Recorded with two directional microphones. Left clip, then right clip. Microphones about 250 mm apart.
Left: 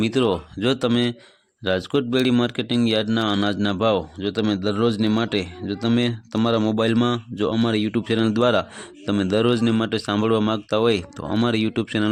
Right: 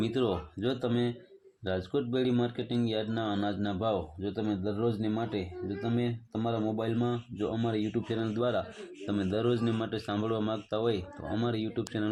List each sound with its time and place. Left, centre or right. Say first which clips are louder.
0.0 s speech: left 9 dB; left